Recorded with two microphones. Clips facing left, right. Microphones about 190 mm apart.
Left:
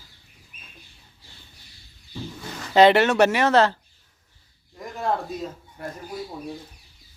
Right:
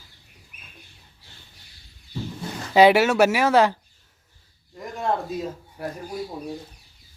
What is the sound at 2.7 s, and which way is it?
Speech, 10° right (ahead or behind).